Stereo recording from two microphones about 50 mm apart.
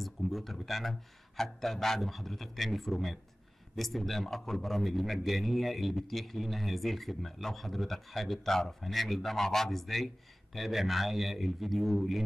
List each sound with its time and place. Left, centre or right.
0.0 s a man's voice: centre